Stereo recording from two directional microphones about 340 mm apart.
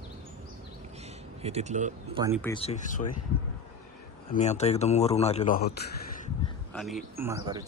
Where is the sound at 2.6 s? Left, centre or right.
Centre.